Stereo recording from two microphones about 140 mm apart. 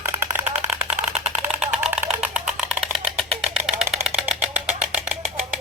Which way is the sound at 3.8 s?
Centre (ahead or behind).